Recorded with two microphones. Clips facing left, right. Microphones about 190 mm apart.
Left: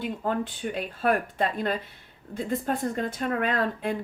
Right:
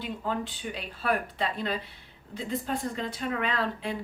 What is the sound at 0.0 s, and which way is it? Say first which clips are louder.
Speech: left 4 dB; 50° left (ahead or behind).